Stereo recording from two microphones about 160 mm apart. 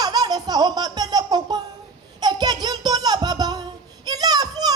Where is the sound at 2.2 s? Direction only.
25° right (ahead or behind).